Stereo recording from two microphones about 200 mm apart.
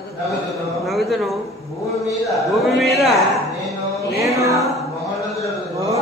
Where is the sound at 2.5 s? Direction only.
Centre (ahead or behind).